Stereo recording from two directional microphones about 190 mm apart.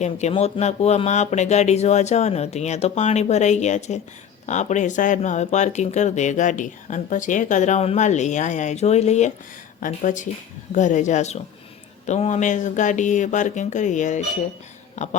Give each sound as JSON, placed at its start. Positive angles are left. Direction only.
{"t": 0.0, "sound": "speech", "side_deg": 35}